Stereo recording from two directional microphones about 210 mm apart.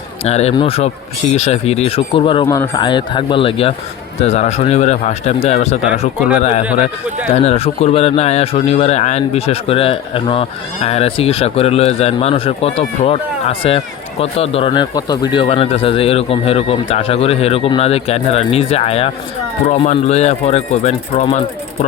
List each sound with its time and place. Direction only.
0.3 s speech: 30° left (ahead or behind)
7.3 s speech: 30° left (ahead or behind)